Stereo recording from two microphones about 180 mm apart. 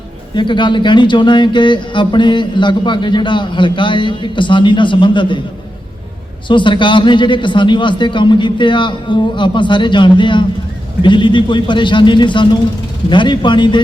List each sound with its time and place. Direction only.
0.3 s speech: 25° left (ahead or behind)
6.5 s speech: 25° left (ahead or behind)